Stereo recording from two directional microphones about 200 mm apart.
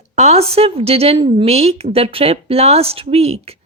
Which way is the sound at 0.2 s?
35° right (ahead or behind).